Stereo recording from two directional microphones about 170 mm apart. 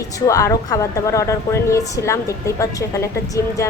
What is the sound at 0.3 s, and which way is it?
A woman's voice, 20° left (ahead or behind).